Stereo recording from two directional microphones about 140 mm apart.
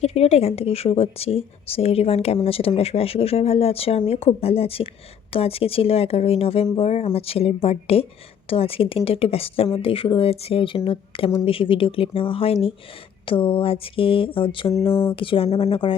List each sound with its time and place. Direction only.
0.0 s a woman's voice: 45° left (ahead or behind)